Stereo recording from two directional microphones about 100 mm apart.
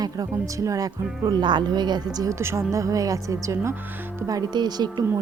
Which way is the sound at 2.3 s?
30° right (ahead or behind).